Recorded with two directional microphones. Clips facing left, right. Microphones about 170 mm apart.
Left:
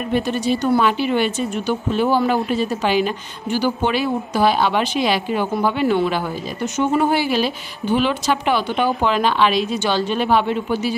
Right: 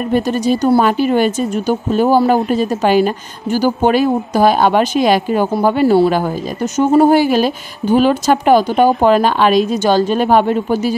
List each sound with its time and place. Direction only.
0.1 s speech: 40° right (ahead or behind)